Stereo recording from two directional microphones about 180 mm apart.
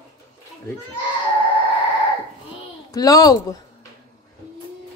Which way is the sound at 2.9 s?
20° left (ahead or behind).